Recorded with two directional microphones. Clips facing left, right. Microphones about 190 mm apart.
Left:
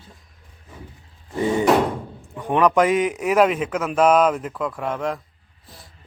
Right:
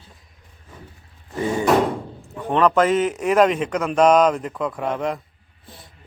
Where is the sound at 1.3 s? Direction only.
20° left (ahead or behind).